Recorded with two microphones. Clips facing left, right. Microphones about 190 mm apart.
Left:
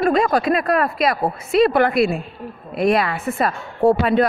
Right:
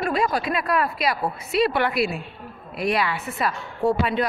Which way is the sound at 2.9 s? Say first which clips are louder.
Left 5 dB; 50° left (ahead or behind).